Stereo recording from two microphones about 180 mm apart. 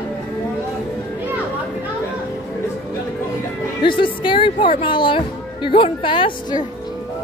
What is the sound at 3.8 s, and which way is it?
Speech, 25° left (ahead or behind).